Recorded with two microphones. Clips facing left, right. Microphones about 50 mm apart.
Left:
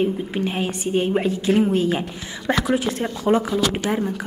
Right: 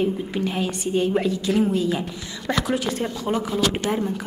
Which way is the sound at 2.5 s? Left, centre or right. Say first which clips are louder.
Left 3 dB; left.